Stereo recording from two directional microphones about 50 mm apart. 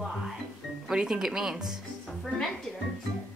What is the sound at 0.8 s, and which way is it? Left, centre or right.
Speech, centre.